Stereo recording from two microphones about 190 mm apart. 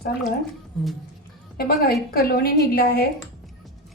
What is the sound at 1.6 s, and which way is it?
A woman's voice, 55° left (ahead or behind).